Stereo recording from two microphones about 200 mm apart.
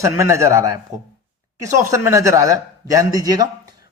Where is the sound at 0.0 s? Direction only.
15° right (ahead or behind).